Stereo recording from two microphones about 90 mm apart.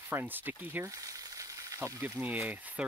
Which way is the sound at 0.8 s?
40° right (ahead or behind).